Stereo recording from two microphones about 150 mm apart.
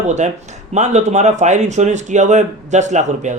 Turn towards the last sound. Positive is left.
turn(degrees=-50)  # may be behind; listen again after turning